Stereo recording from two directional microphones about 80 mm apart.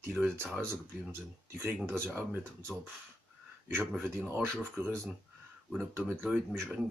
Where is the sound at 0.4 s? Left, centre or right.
Right.